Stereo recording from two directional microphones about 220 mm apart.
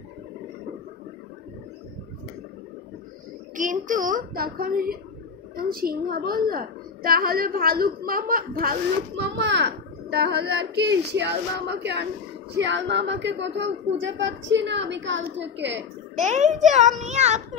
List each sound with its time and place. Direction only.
3.5 s a woman's voice: 35° right (ahead or behind); by 15.8 s 50° right (ahead or behind)
16.2 s a woman's voice: 35° right (ahead or behind)